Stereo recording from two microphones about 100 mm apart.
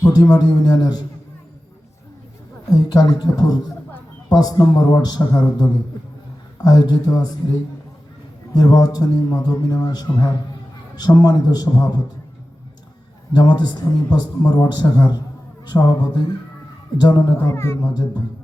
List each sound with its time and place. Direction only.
0.1 s speech: 45° left (ahead or behind)
2.7 s a man's voice: 45° left (ahead or behind)
13.3 s a man's voice: 45° left (ahead or behind)
17.6 s speech: 25° left (ahead or behind)
17.8 s a man's voice: 40° left (ahead or behind)